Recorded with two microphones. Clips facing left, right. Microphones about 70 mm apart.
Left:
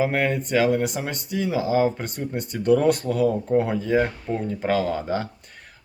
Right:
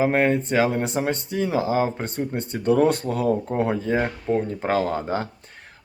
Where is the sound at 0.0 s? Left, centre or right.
Right.